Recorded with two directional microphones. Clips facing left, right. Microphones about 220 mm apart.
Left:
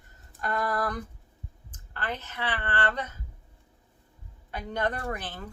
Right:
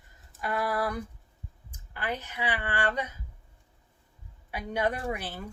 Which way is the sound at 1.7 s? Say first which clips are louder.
Right 1 dB; 10° right (ahead or behind).